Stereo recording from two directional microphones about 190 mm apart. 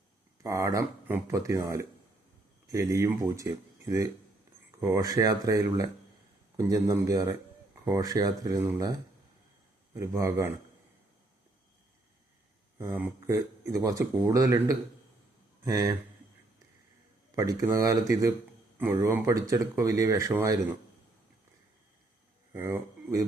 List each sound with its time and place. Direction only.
0.4 s speech: 15° right (ahead or behind)
12.8 s speech: 15° right (ahead or behind)
17.3 s speech: 20° right (ahead or behind)
22.5 s speech: 15° right (ahead or behind)